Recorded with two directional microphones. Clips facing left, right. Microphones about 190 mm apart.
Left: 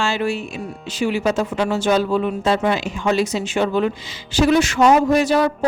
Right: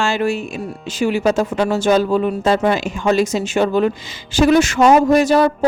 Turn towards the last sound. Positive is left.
turn(degrees=-45)  # may be behind; listen again after turning